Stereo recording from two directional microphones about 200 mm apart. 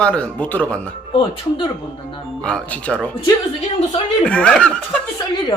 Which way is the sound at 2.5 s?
5° left (ahead or behind).